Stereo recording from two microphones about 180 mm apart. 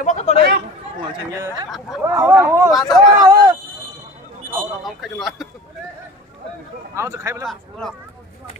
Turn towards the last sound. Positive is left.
turn(degrees=0)  # may be behind; listen again after turning